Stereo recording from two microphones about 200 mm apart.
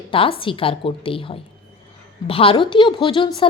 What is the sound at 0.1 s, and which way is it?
A woman's voice, 25° left (ahead or behind).